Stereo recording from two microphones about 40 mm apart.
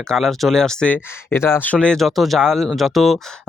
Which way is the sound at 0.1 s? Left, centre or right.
Centre.